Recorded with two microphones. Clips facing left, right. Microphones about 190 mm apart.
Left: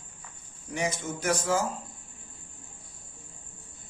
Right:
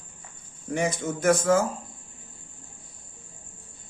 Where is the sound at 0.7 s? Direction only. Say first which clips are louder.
Right 5 dB; 55° right (ahead or behind).